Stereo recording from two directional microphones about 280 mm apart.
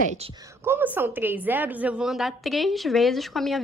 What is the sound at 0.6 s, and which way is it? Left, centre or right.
A woman's voice, centre.